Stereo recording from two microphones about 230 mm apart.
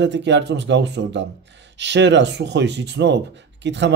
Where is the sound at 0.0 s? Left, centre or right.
Right.